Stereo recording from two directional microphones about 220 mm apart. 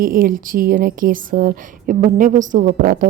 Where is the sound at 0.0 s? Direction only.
40° right (ahead or behind).